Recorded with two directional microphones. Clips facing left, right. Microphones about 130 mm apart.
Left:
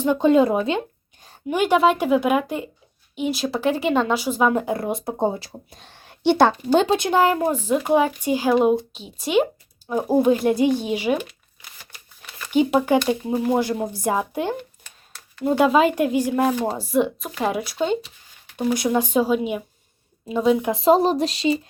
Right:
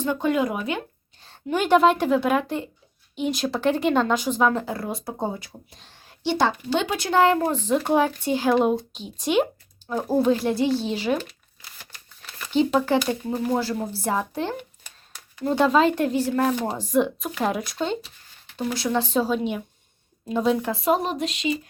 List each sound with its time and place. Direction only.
0.0 s speech: 20° left (ahead or behind)
1.2 s speech: 10° left (ahead or behind)
4.6 s speech: 20° left (ahead or behind)
5.5 s speech: 55° left (ahead or behind)
6.9 s speech: 15° left (ahead or behind); by 9.9 s centre (ahead or behind)
9.9 s speech: 15° left (ahead or behind)
12.5 s speech: 10° left (ahead or behind)
18.5 s speech: 15° left (ahead or behind)
20.7 s speech: 25° left (ahead or behind)